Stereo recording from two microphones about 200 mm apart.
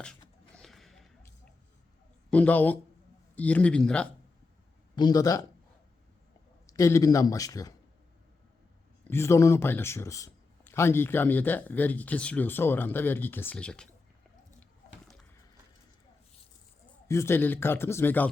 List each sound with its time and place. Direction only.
0.0 s a sound: 5° left (ahead or behind)
2.3 s speech: 10° left (ahead or behind)
4.9 s speech: 20° left (ahead or behind)
6.7 s speech: 15° left (ahead or behind)
9.0 s speech: 10° left (ahead or behind)
17.1 s speech: 15° left (ahead or behind)